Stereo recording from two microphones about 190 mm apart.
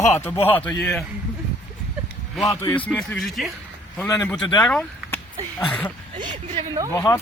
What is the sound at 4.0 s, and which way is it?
Speech, 15° left (ahead or behind).